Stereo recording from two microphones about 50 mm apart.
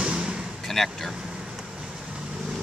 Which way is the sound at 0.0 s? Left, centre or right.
Centre.